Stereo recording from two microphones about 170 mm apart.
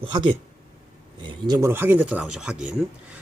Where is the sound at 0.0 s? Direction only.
30° right (ahead or behind).